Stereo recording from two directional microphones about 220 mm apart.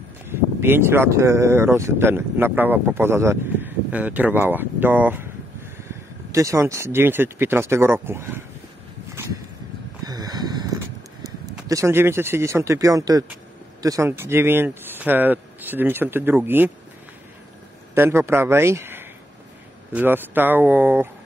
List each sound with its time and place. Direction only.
0.3 s speech: 10° right (ahead or behind)
10.0 s a sound: 15° right (ahead or behind)
11.6 s speech: 15° right (ahead or behind)
17.9 s speech: 10° right (ahead or behind)